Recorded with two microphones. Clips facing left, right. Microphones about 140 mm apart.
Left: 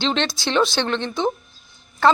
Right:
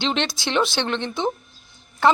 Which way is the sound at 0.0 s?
15° right (ahead or behind).